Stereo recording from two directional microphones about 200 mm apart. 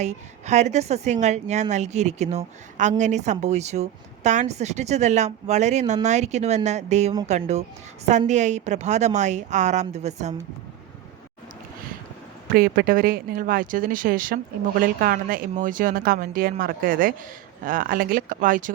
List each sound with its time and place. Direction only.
0.0 s a woman's voice: 35° right (ahead or behind)
12.5 s speech: 50° right (ahead or behind)